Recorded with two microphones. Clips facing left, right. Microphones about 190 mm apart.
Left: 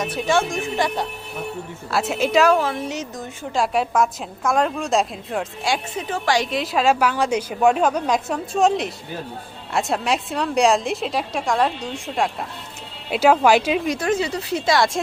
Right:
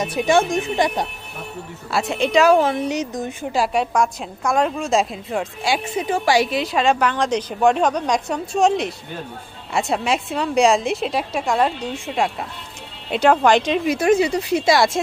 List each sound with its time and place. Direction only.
0.0 s speech: 15° right (ahead or behind)
1.9 s a woman's voice: centre (ahead or behind)
2.6 s speech: 20° right (ahead or behind)
3.5 s a woman's voice: centre (ahead or behind)
13.8 s speech: 10° right (ahead or behind)